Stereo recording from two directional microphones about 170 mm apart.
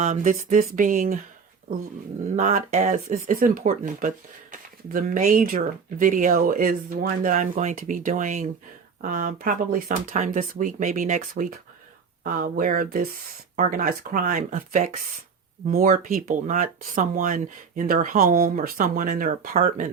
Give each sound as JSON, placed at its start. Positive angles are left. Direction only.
{"t": 0.0, "sound": "speech", "side_deg": -45}
{"t": 2.3, "sound": "speech", "side_deg": -50}
{"t": 19.5, "sound": "speech", "side_deg": -45}